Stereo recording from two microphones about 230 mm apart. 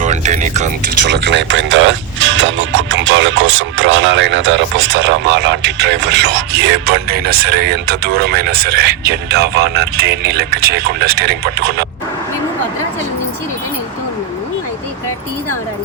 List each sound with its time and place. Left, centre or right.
0.0 s music: right
1.0 s speech: right